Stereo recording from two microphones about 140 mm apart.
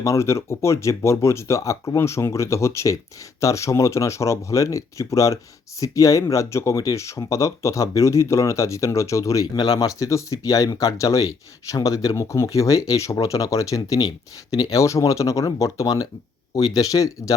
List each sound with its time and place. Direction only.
0.0 s speech: 20° left (ahead or behind)